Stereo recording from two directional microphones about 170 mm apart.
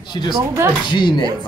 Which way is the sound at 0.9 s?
25° left (ahead or behind).